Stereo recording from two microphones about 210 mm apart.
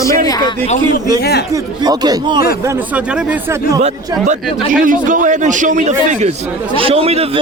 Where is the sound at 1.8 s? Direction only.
20° right (ahead or behind).